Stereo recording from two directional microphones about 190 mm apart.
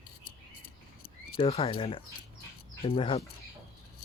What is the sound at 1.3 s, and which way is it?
Speech, 35° left (ahead or behind).